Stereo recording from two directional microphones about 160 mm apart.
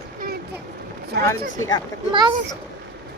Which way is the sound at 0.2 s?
80° right.